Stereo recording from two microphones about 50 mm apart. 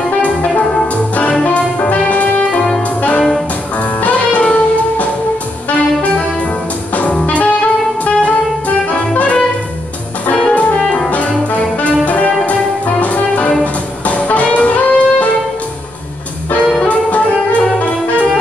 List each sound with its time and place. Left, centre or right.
0.2 s music: left
7.0 s music: left
16.8 s music: left